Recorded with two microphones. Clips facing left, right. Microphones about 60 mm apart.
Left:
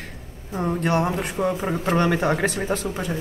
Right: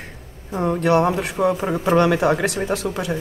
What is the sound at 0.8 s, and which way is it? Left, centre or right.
Speech, right.